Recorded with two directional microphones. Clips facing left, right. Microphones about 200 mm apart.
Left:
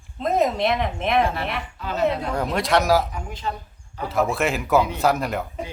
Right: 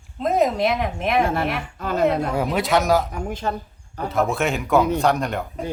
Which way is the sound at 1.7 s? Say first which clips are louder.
Right 3 dB; 45° right (ahead or behind).